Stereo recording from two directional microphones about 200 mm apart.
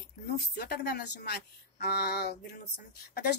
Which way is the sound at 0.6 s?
50° left (ahead or behind).